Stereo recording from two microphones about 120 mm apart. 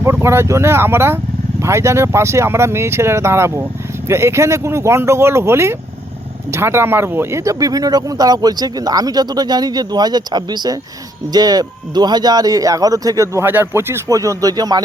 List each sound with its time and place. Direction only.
0.0 s speech: 25° right (ahead or behind)